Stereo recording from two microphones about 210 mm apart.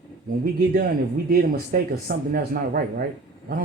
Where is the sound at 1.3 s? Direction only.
45° right (ahead or behind).